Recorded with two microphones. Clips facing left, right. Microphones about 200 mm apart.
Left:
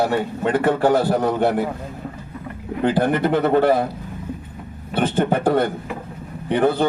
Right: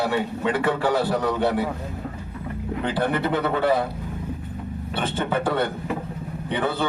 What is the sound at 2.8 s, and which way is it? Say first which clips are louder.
Speech: left 6 dB; 50° left (ahead or behind).